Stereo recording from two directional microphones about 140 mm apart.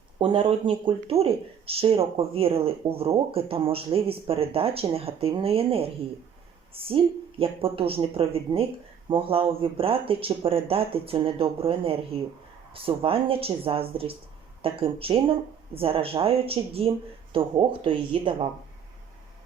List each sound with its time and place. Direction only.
0.2 s speech: 35° right (ahead or behind)